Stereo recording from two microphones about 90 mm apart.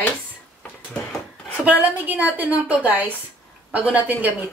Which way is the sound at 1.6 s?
20° right (ahead or behind).